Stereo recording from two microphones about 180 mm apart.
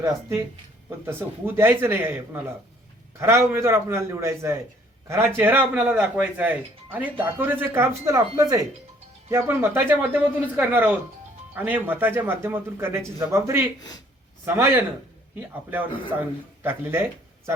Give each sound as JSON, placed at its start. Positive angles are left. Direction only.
{"t": 0.0, "sound": "speech", "side_deg": -15}